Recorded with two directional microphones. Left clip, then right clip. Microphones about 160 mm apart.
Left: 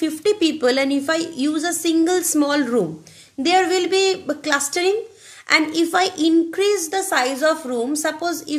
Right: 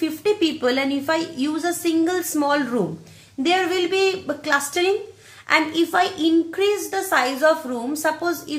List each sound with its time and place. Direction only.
0.0 s a woman's voice: 40° left (ahead or behind)